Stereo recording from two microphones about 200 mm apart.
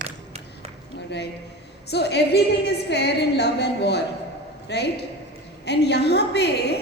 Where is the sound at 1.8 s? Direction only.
55° left (ahead or behind).